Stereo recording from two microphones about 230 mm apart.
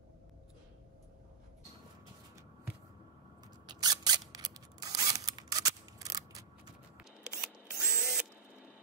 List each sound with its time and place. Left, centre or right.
3.6 s scissors: centre
7.0 s drill: centre